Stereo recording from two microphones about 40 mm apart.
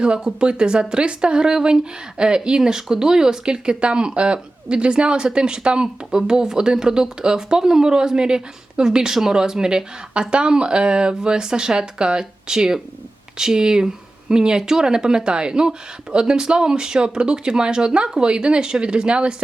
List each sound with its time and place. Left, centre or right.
0.0 s speech: right